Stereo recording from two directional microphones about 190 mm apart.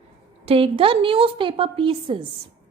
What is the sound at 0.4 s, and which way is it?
A woman's voice, 30° right (ahead or behind).